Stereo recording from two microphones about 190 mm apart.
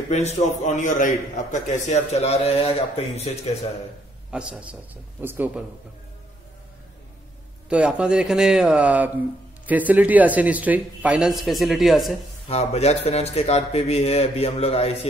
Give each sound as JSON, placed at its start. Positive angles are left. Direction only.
{"t": 0.1, "sound": "a man's voice", "side_deg": 35}
{"t": 4.3, "sound": "a man's voice", "side_deg": -5}
{"t": 7.7, "sound": "a man's voice", "side_deg": -5}
{"t": 12.4, "sound": "a man's voice", "side_deg": 35}